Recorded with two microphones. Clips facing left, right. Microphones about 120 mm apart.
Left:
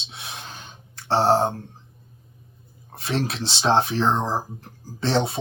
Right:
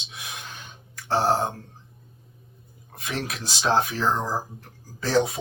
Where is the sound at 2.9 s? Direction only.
30° left (ahead or behind).